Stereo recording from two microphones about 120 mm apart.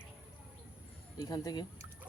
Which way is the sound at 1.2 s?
30° left (ahead or behind).